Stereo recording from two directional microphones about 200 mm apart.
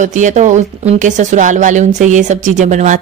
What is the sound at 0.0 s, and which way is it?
Speech, 40° right (ahead or behind).